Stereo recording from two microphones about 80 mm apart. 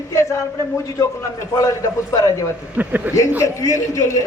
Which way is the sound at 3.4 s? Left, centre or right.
Left.